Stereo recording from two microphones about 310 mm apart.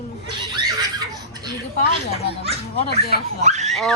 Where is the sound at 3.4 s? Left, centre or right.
Right.